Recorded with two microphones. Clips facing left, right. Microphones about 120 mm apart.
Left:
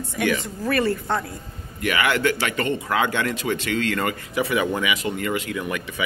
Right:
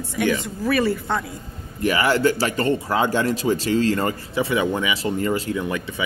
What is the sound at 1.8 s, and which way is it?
Speech, 35° right (ahead or behind).